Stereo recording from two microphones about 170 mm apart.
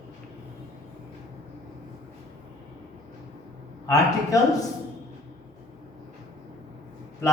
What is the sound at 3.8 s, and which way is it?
Speech, 20° left (ahead or behind).